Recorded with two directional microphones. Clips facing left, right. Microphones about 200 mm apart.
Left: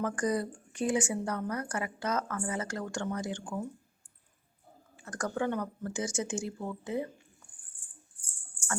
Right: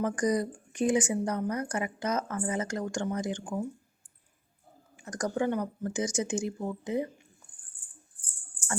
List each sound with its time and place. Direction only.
0.0 s speech: 15° right (ahead or behind)
4.9 s speech: 15° right (ahead or behind)